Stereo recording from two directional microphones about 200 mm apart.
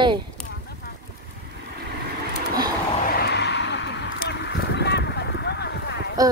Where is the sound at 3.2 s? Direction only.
55° left (ahead or behind).